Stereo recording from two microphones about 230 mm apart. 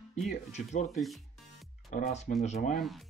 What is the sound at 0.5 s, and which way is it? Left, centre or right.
Speech, left.